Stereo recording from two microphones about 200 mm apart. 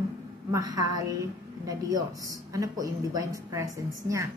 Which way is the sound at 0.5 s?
20° right (ahead or behind).